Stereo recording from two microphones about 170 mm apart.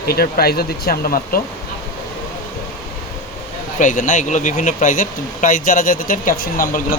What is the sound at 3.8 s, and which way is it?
Speech, 50° left (ahead or behind).